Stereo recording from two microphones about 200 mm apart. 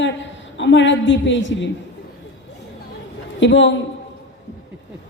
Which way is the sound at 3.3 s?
65° left (ahead or behind).